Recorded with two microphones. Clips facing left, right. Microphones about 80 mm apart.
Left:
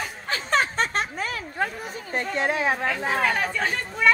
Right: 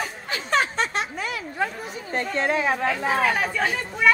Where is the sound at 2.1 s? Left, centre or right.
Right.